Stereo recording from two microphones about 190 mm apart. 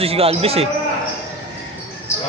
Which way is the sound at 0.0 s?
30° right (ahead or behind).